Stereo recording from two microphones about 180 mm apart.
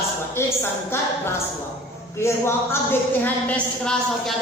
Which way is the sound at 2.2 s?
15° left (ahead or behind).